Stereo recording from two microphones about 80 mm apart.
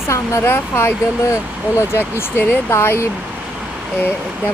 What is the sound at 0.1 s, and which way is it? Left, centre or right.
Speech, left.